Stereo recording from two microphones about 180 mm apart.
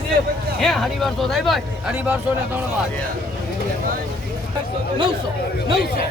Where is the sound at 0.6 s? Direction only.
Centre (ahead or behind).